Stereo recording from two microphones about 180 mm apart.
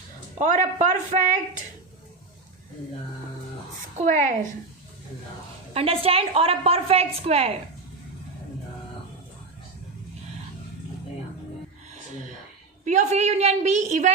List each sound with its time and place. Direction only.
0.3 s a woman's voice: 40° right (ahead or behind)
3.9 s a woman's voice: 45° right (ahead or behind)
5.7 s a woman's voice: 30° right (ahead or behind)
12.8 s a woman's voice: 40° right (ahead or behind)